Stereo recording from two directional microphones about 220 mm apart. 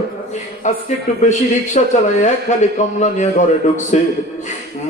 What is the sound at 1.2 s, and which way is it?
A man's voice, 30° left (ahead or behind).